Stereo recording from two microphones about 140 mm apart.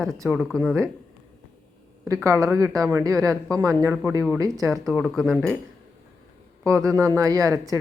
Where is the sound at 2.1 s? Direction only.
20° right (ahead or behind).